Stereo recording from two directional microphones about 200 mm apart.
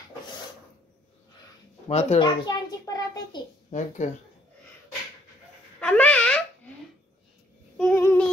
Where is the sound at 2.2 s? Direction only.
20° left (ahead or behind).